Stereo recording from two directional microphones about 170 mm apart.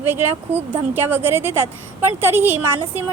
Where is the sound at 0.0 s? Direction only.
10° right (ahead or behind).